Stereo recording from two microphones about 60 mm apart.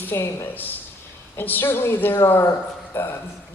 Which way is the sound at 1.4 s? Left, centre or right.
Left.